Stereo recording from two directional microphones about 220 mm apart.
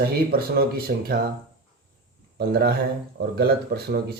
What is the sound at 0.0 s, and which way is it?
Speech, 45° right (ahead or behind).